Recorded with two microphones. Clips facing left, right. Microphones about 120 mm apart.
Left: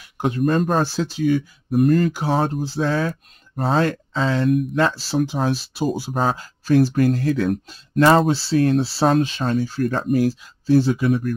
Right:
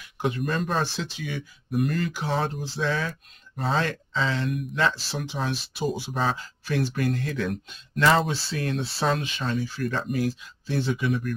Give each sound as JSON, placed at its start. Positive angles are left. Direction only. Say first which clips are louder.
{"t": 0.2, "sound": "speech", "louder": "left 7 dB", "side_deg": 40}